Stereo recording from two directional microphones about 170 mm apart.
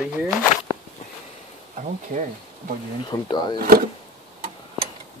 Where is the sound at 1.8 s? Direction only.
45° right (ahead or behind).